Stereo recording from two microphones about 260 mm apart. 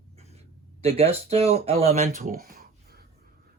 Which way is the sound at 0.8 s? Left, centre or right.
Right.